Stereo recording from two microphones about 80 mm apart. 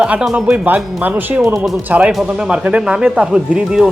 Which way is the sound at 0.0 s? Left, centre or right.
Centre.